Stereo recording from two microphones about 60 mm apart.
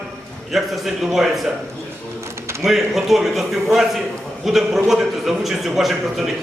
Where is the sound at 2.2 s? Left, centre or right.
Right.